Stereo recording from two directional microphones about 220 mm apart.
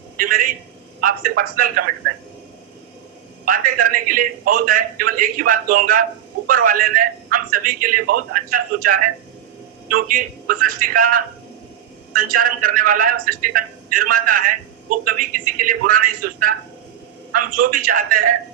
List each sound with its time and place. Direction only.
0.2 s a man's voice: 40° right (ahead or behind)
3.4 s a man's voice: 40° right (ahead or behind)